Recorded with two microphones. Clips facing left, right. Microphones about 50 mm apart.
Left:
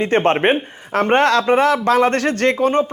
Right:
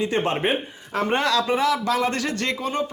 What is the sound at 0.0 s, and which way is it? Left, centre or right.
A man's voice, left.